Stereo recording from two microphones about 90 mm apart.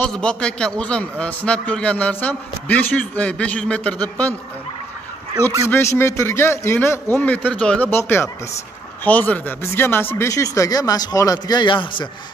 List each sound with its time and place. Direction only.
0.1 s a man's voice: 10° left (ahead or behind)
5.7 s a man's voice: 30° left (ahead or behind)
7.2 s a man's voice: 15° left (ahead or behind)
7.9 s a man's voice: 25° left (ahead or behind)
9.0 s a man's voice: 15° left (ahead or behind)
10.3 s a man's voice: 35° left (ahead or behind); by 12.1 s 65° left (ahead or behind)